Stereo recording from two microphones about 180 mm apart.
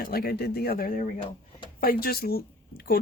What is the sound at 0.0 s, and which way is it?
Speech, 55° left (ahead or behind).